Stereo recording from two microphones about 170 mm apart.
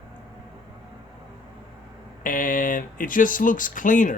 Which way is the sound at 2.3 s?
50° left (ahead or behind).